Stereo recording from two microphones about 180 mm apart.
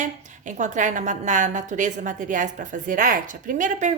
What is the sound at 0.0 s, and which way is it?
A woman's voice, 45° right (ahead or behind).